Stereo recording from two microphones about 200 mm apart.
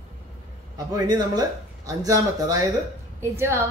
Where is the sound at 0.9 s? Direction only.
20° right (ahead or behind).